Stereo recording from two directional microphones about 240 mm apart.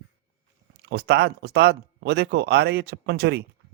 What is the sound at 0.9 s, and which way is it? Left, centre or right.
A man's voice, right.